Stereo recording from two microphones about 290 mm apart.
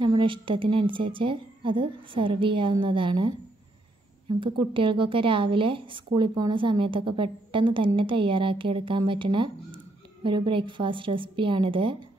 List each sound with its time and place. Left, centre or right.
0.0 s speech: centre
4.4 s speech: centre